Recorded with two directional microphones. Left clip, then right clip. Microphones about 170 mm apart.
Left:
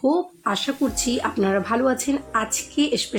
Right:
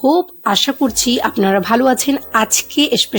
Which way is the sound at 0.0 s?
50° right (ahead or behind).